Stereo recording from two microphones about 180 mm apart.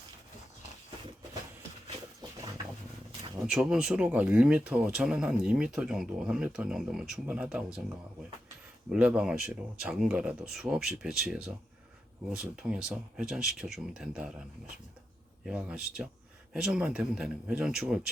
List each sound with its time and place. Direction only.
2.2 s a sound: 20° right (ahead or behind)
3.4 s speech: 5° right (ahead or behind)
8.9 s speech: 5° right (ahead or behind)
15.4 s speech: 5° right (ahead or behind)